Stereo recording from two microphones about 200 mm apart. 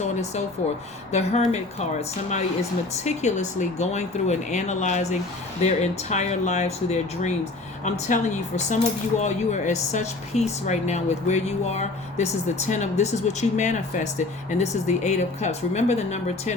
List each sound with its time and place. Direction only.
0.0 s speech: 35° left (ahead or behind)